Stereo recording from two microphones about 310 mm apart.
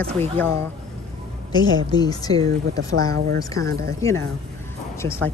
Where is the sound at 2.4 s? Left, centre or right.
Right.